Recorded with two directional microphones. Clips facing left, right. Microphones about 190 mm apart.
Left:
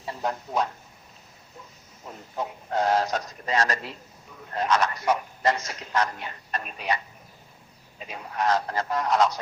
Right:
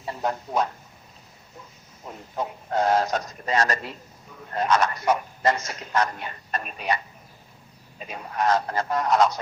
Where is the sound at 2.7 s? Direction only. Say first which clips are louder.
Right 2 dB; 50° right (ahead or behind).